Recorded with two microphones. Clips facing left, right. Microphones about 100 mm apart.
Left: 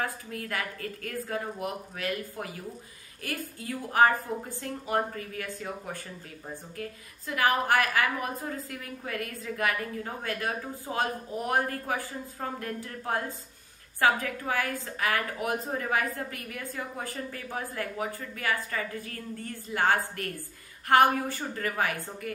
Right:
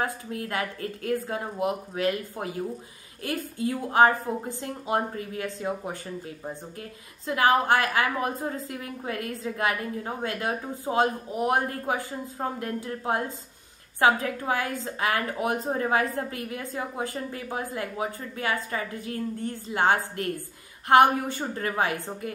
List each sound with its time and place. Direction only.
0.0 s a woman's voice: 25° right (ahead or behind)